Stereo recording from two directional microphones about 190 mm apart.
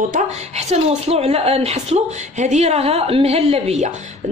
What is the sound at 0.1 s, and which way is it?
A woman's voice, 35° right (ahead or behind).